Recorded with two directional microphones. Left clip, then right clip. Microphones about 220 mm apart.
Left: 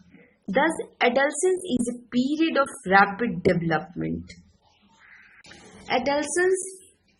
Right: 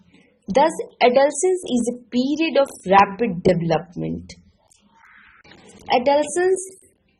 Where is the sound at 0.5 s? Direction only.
15° right (ahead or behind).